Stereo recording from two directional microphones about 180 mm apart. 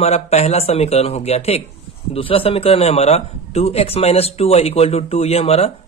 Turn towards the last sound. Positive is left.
turn(degrees=35)  # may be behind; listen again after turning